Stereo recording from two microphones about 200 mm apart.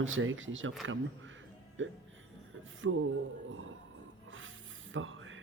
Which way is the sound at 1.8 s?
70° right (ahead or behind).